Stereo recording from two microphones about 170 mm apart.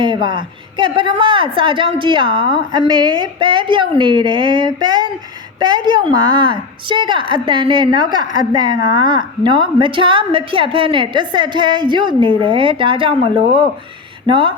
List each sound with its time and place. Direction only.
0.0 s a woman's voice: 25° right (ahead or behind)